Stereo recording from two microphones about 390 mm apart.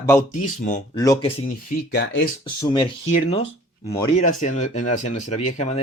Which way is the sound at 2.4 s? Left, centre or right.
Centre.